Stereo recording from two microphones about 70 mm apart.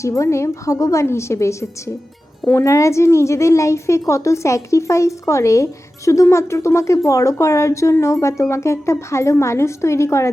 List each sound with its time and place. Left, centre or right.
0.0 s a woman's voice: left
2.6 s a woman's voice: left